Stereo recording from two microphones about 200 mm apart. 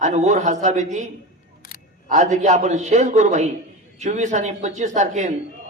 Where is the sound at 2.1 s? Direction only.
35° right (ahead or behind).